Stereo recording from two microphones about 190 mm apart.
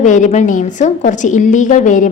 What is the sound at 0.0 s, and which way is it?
A woman's voice, 40° left (ahead or behind).